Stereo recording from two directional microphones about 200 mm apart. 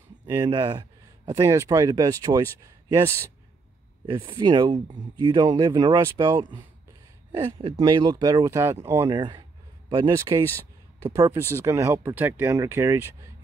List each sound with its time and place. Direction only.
0.3 s speech: 20° right (ahead or behind)
4.0 s speech: 25° right (ahead or behind)
10.4 s speech: 10° left (ahead or behind)
11.1 s speech: 15° right (ahead or behind)